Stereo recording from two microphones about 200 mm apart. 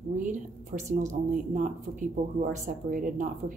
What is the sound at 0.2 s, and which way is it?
A woman's voice, 40° right (ahead or behind).